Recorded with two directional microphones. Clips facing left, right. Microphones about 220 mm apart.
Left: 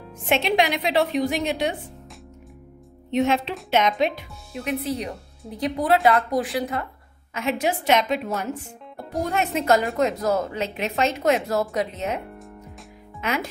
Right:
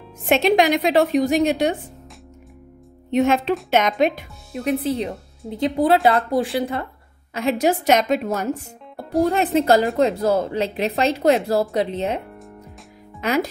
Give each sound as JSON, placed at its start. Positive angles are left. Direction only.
{"t": 0.3, "sound": "a woman's voice", "side_deg": -40}
{"t": 3.1, "sound": "a woman's voice", "side_deg": -50}
{"t": 4.6, "sound": "speech", "side_deg": -30}
{"t": 8.9, "sound": "speech", "side_deg": -35}
{"t": 13.2, "sound": "speech", "side_deg": -35}